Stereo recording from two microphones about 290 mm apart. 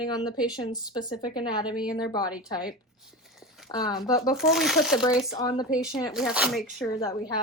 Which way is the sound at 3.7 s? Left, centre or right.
Centre.